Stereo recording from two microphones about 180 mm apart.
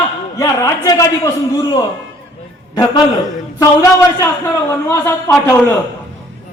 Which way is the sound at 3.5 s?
20° left (ahead or behind).